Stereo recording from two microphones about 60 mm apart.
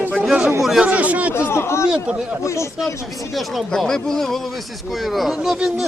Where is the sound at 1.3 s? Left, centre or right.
Left.